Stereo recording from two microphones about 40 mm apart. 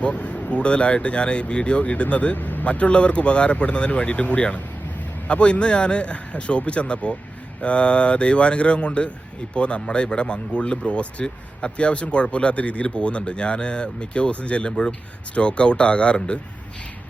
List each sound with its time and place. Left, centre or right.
0.0 s speech: left
2.4 s vehicle: left
2.6 s speech: left